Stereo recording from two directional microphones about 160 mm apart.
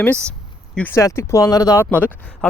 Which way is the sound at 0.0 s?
10° left (ahead or behind).